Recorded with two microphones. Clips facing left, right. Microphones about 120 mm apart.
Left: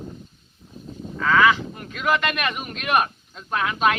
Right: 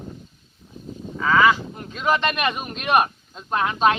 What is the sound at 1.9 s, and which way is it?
A man's voice, 25° right (ahead or behind).